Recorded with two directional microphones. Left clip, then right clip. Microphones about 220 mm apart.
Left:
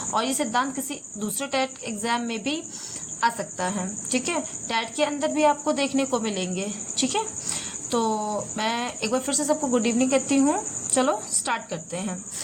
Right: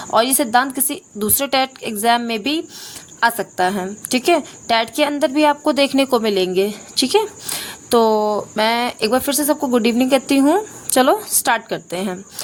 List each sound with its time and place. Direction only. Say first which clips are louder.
0.1 s a woman's voice: right 10 dB; 50° right (ahead or behind)